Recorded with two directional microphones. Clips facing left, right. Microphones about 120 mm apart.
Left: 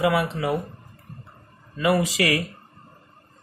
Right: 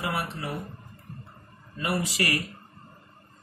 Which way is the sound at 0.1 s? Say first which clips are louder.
Left 9 dB; 90° left.